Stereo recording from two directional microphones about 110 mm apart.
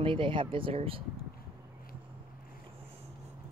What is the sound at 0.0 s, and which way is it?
Speech, 50° right (ahead or behind).